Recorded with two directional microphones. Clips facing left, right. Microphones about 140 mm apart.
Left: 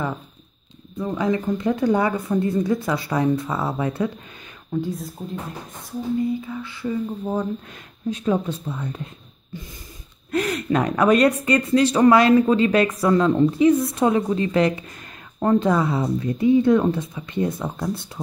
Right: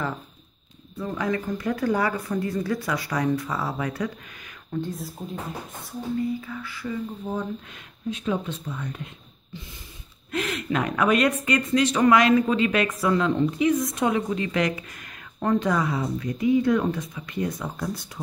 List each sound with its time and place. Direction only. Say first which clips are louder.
0.9 s speech: left 4 dB; 20° left (ahead or behind)
4.7 s speech: left 4 dB; 10° left (ahead or behind)
5.2 s speech: left 3 dB; centre (ahead or behind)
6.1 s speech: left 4 dB; 25° left (ahead or behind)
8.1 s speech: left 5 dB; 40° left (ahead or behind)
10.3 s speech: left 5 dB; 40° left (ahead or behind)